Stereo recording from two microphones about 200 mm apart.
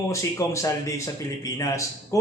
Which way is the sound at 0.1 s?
15° left (ahead or behind).